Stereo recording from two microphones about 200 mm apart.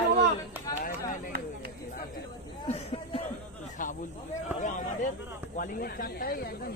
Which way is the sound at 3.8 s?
40° left (ahead or behind).